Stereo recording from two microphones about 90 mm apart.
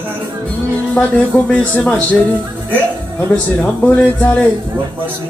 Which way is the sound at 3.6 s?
15° left (ahead or behind).